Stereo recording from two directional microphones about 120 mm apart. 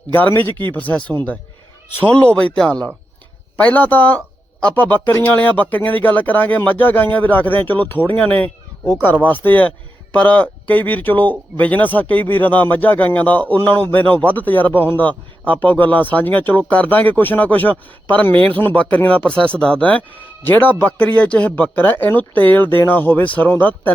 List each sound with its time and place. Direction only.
0.1 s speech: 15° left (ahead or behind)